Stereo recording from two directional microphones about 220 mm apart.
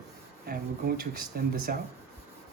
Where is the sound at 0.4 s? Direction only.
40° right (ahead or behind).